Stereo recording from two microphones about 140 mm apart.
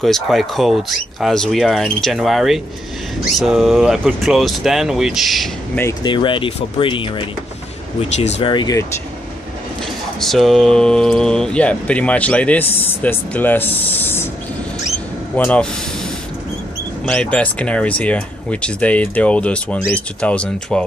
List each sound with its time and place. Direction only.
0.0 s speech: centre (ahead or behind)
6.0 s speech: 35° left (ahead or behind)
10.2 s speech: centre (ahead or behind)
15.3 s speech: 10° left (ahead or behind)
17.0 s speech: 10° left (ahead or behind)